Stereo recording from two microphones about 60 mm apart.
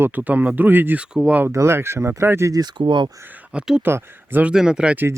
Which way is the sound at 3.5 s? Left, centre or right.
Centre.